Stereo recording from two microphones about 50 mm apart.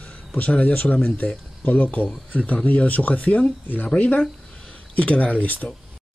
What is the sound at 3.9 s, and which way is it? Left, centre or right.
Speech, left.